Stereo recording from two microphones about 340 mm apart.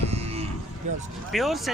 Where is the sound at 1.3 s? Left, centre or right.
Centre.